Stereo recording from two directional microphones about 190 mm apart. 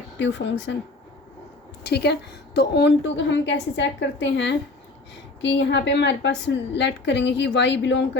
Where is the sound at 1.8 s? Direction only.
60° left (ahead or behind).